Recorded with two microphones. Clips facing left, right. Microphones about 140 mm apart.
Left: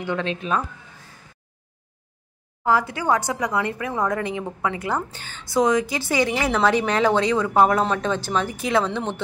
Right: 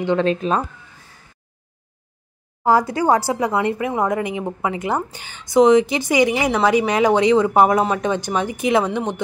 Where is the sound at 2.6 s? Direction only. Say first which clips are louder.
Right 5 dB; 35° right (ahead or behind).